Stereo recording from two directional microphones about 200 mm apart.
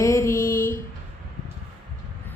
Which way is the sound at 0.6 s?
45° left (ahead or behind).